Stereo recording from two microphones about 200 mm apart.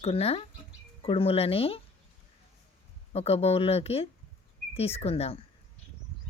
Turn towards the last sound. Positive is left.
turn(degrees=30)  # may be behind; listen again after turning